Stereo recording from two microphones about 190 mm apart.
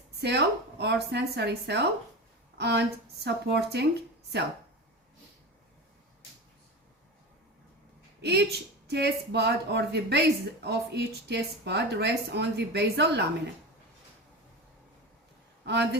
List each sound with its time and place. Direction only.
0.2 s a woman's voice: 60° right (ahead or behind)
8.2 s a woman's voice: 60° right (ahead or behind)
15.6 s a woman's voice: 60° right (ahead or behind)